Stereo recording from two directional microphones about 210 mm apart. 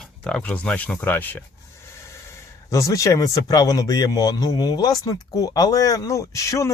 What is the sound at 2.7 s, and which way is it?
Speech, 15° left (ahead or behind).